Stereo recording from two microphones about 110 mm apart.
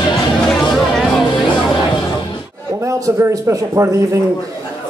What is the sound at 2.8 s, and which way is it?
A man's voice, 30° right (ahead or behind).